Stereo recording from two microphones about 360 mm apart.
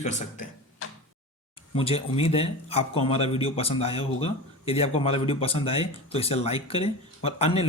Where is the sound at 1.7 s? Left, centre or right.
Centre.